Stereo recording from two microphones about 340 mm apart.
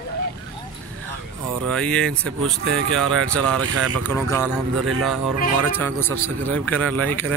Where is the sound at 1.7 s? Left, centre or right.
Centre.